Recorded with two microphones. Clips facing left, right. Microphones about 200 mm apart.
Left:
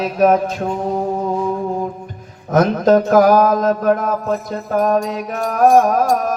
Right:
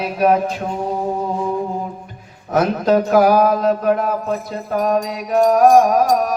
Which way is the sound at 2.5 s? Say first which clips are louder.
Left 3 dB; 45° left (ahead or behind).